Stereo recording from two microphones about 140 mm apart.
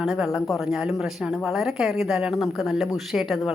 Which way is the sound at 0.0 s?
Centre (ahead or behind).